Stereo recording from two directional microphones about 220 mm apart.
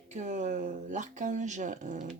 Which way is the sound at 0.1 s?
35° right (ahead or behind).